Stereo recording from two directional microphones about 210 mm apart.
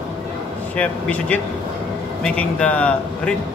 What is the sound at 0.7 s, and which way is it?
A man's voice, 5° left (ahead or behind).